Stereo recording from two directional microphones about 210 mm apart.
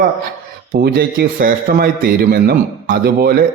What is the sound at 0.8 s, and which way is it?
A man's voice, 45° right (ahead or behind).